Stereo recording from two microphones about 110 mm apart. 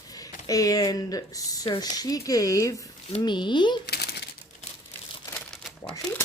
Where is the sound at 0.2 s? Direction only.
35° left (ahead or behind).